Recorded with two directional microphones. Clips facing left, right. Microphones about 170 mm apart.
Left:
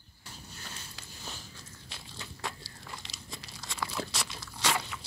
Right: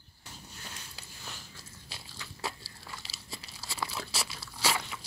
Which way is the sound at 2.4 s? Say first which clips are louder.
Right 2 dB; 5° right (ahead or behind).